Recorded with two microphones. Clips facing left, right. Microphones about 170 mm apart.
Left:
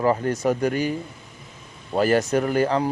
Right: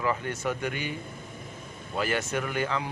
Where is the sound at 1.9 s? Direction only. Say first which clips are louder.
Left 9 dB; 40° left (ahead or behind).